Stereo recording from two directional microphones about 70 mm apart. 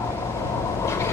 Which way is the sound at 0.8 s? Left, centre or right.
Left.